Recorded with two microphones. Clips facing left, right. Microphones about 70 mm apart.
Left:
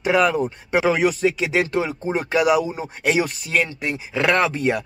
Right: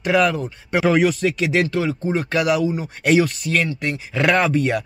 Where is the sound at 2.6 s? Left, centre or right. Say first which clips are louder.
Right 6 dB; left.